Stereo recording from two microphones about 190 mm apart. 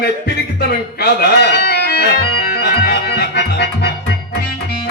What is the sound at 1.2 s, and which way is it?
Organ, 55° left (ahead or behind).